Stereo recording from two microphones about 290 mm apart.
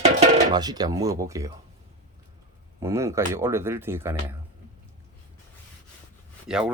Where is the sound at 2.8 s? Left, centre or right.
Centre.